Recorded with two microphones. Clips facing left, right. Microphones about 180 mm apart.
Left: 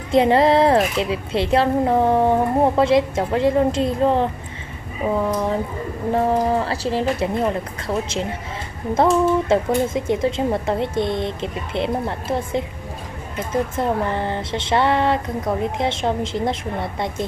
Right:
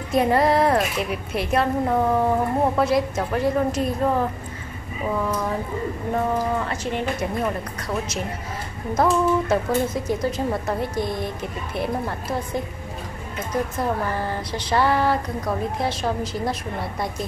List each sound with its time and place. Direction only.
0.1 s a woman's voice: 25° left (ahead or behind)